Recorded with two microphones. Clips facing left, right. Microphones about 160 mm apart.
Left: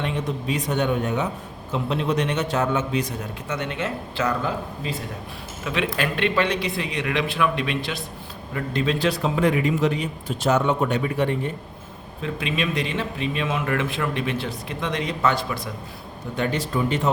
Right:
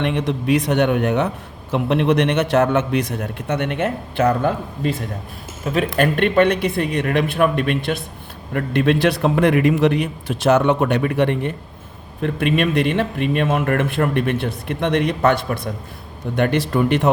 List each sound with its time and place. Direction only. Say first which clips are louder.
0.0 s a man's voice: right 6 dB; 70° right (ahead or behind)
12.2 s a man's voice: right 7 dB; 60° right (ahead or behind)